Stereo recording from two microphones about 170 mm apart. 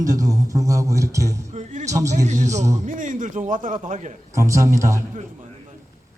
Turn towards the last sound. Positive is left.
turn(degrees=-20)  # may be behind; listen again after turning